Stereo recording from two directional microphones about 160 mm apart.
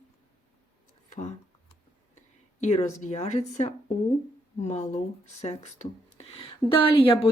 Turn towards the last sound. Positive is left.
turn(degrees=35)  # may be behind; listen again after turning